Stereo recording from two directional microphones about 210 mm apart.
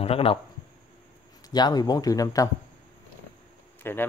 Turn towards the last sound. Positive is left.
turn(degrees=10)  # may be behind; listen again after turning